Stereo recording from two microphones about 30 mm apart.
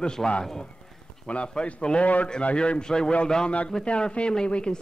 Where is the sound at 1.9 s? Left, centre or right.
Left.